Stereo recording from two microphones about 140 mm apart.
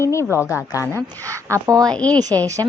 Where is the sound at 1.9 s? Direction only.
10° left (ahead or behind).